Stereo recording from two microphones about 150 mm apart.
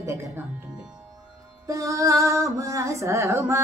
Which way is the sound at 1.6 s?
20° right (ahead or behind).